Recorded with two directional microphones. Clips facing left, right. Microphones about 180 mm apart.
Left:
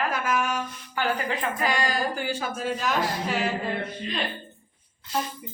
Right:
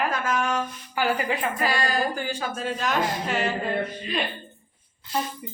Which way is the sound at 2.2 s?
10° left (ahead or behind).